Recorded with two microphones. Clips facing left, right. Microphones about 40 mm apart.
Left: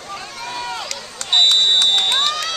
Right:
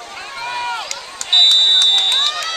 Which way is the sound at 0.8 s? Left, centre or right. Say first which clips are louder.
Right 1 dB; centre.